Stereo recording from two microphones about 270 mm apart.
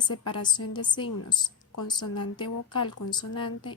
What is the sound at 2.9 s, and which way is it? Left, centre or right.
Speech, left.